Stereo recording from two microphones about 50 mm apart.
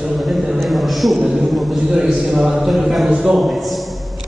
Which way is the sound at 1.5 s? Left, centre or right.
Centre.